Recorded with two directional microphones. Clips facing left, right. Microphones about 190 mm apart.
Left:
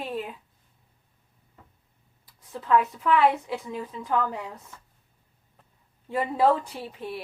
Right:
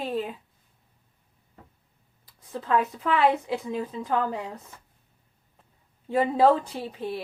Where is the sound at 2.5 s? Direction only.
30° right (ahead or behind).